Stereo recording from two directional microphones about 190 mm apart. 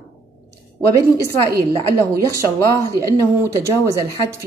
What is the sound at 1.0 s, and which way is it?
A woman's voice, 15° right (ahead or behind).